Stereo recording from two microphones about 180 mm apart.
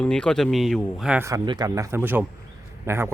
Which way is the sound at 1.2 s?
20° right (ahead or behind).